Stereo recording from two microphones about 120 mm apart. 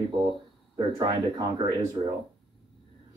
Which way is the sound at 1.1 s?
30° right (ahead or behind).